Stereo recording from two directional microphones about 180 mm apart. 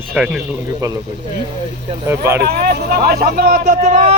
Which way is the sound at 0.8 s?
20° right (ahead or behind).